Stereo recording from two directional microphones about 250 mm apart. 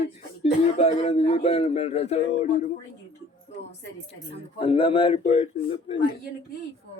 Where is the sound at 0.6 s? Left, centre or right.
Left.